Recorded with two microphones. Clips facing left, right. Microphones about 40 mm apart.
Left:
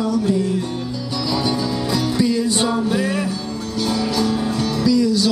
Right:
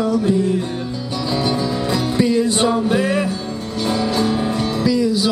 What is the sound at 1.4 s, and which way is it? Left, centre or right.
Music, right.